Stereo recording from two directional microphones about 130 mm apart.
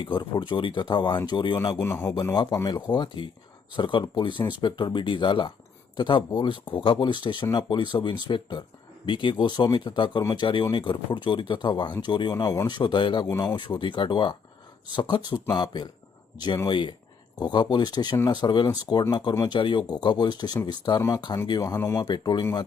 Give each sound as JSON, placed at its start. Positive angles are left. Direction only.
{"t": 0.0, "sound": "speech", "side_deg": 40}
{"t": 1.8, "sound": "speech", "side_deg": 20}
{"t": 2.3, "sound": "speech", "side_deg": 40}
{"t": 13.3, "sound": "speech", "side_deg": 25}
{"t": 13.6, "sound": "speech", "side_deg": 40}
{"t": 22.0, "sound": "speech", "side_deg": 30}